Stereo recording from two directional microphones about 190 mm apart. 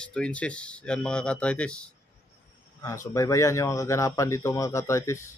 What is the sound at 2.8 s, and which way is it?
A man's voice, 15° left (ahead or behind).